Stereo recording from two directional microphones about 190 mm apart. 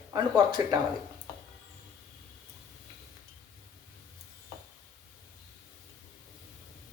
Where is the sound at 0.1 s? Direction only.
20° right (ahead or behind).